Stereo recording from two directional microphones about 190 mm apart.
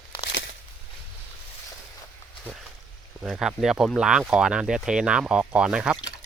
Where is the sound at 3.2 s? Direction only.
Centre (ahead or behind).